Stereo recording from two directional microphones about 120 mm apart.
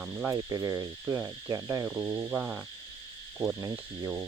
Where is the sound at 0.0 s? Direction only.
10° right (ahead or behind).